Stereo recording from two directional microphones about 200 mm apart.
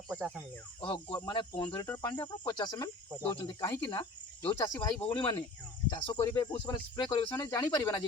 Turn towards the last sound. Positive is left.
turn(degrees=20)  # may be behind; listen again after turning